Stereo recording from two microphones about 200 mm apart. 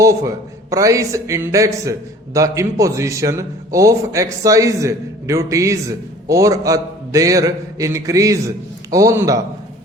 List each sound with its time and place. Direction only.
0.0 s a man's voice: 15° right (ahead or behind)